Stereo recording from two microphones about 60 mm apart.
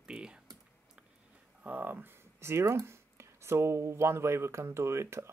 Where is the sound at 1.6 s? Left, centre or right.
Right.